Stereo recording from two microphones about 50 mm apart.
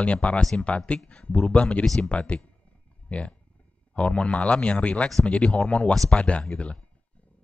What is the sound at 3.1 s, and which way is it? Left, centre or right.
Speech, left.